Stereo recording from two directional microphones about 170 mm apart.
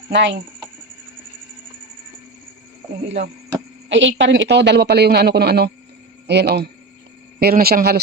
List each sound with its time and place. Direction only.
0.1 s speech: 90° right
3.8 s a man's voice: 90° right
7.3 s speech: 65° right (ahead or behind)